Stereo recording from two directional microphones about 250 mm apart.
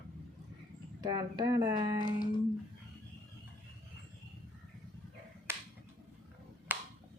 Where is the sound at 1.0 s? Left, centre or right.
Centre.